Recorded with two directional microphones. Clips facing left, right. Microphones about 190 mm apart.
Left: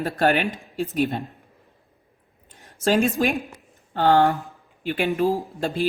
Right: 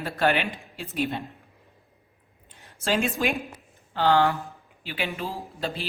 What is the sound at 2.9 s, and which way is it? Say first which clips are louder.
Speech: left 5 dB; 35° left (ahead or behind).